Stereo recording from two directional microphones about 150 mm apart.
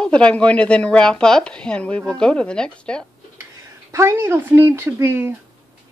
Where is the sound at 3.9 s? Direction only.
20° right (ahead or behind).